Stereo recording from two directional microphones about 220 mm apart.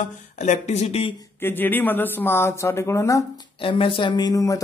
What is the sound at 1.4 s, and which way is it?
Speech, 10° left (ahead or behind).